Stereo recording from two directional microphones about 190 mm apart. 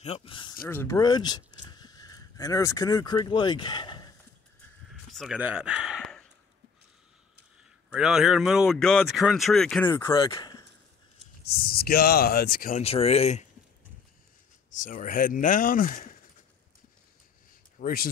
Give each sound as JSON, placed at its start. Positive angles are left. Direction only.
{"t": 0.0, "sound": "speech", "side_deg": 30}
{"t": 0.7, "sound": "speech", "side_deg": 15}
{"t": 5.1, "sound": "speech", "side_deg": 0}
{"t": 7.9, "sound": "speech", "side_deg": 0}
{"t": 10.1, "sound": "speech", "side_deg": 25}
{"t": 11.5, "sound": "speech", "side_deg": 55}
{"t": 12.8, "sound": "speech", "side_deg": 30}
{"t": 14.8, "sound": "speech", "side_deg": 45}
{"t": 17.7, "sound": "speech", "side_deg": 50}